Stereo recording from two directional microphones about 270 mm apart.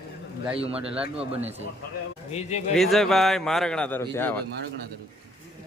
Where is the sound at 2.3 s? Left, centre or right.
Left.